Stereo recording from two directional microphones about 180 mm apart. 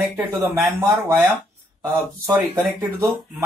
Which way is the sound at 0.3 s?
15° right (ahead or behind).